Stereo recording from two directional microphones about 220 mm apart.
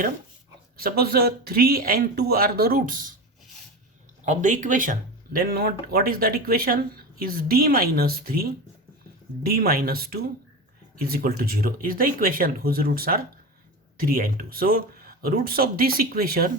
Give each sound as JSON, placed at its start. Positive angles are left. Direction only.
{"t": 0.8, "sound": "speech", "side_deg": -45}
{"t": 4.3, "sound": "speech", "side_deg": -35}
{"t": 9.5, "sound": "speech", "side_deg": -40}